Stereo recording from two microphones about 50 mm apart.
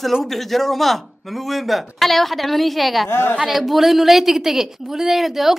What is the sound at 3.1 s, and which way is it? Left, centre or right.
Speech, left.